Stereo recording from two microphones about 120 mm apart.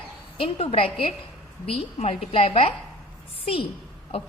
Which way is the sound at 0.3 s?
55° left (ahead or behind).